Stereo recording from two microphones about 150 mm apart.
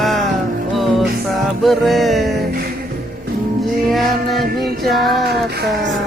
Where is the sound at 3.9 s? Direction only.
Centre (ahead or behind).